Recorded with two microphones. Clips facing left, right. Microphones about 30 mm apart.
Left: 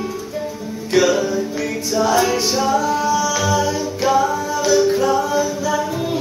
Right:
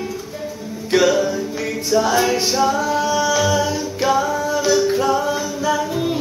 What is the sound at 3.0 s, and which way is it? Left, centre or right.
Music, right.